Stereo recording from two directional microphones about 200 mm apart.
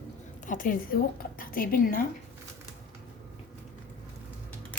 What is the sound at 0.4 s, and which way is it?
A woman's voice, 40° left (ahead or behind).